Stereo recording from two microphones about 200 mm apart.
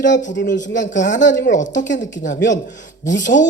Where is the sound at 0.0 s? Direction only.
40° left (ahead or behind).